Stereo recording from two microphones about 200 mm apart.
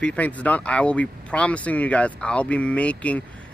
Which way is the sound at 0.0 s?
5° left (ahead or behind).